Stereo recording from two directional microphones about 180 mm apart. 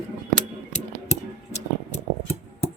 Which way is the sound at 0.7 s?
40° left (ahead or behind).